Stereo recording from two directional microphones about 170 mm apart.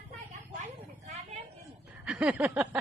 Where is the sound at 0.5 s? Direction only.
40° right (ahead or behind).